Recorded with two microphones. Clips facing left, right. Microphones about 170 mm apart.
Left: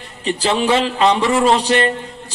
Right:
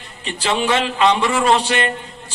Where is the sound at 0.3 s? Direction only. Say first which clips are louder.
Left 3 dB; 35° left (ahead or behind).